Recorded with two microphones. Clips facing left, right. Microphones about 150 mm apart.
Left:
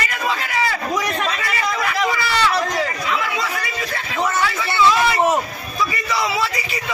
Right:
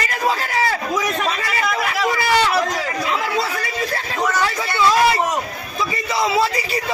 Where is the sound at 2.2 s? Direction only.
50° right (ahead or behind).